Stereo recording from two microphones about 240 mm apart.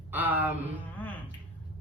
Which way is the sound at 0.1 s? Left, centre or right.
Centre.